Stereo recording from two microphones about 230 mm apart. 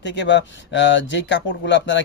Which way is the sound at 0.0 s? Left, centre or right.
Left.